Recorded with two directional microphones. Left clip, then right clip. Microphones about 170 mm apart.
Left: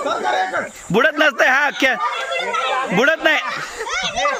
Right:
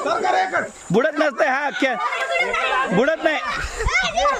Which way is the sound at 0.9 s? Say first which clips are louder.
Left 4 dB; 5° right (ahead or behind).